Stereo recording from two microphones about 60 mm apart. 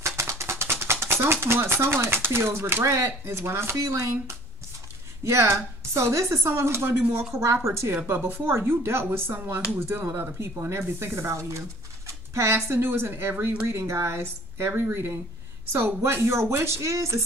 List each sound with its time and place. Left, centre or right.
0.0 s a sound: right
2.8 s speech: right
8.1 s speech: right